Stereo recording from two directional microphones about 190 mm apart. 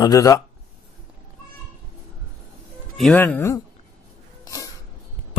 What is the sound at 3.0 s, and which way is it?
Speech, 5° left (ahead or behind).